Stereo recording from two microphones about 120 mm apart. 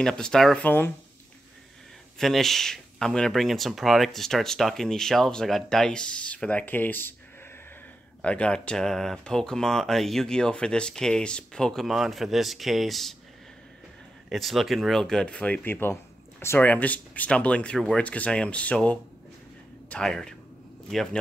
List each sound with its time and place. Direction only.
0.0 s speech: 5° left (ahead or behind)
0.7 s speech: 15° left (ahead or behind)
2.1 s speech: centre (ahead or behind)
8.2 s speech: 10° left (ahead or behind)
14.3 s speech: centre (ahead or behind)